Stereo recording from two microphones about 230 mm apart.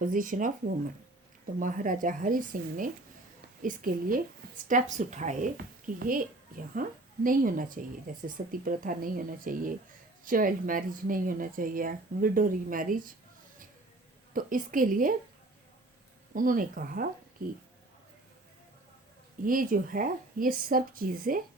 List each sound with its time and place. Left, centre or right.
0.0 s a woman's voice: right
1.5 s a woman's voice: right
14.3 s a woman's voice: right
16.3 s a woman's voice: right
19.5 s a woman's voice: right